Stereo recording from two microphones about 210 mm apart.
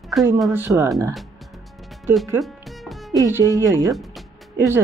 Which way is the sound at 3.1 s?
15° right (ahead or behind).